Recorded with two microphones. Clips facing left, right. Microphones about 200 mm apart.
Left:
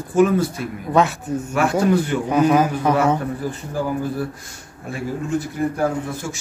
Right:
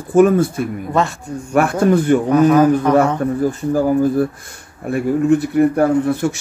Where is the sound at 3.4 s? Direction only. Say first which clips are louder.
Right 8 dB; 45° right (ahead or behind).